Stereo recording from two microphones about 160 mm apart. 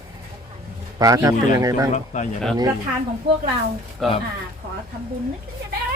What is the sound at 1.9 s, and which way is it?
Speech, 50° left (ahead or behind).